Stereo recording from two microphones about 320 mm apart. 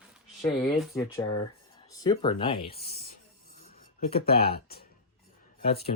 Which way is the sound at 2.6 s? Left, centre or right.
Left.